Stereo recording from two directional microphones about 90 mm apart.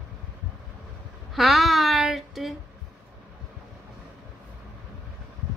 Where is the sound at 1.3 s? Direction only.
Centre (ahead or behind).